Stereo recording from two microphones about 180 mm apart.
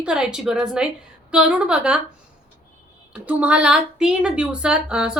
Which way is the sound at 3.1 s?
5° right (ahead or behind).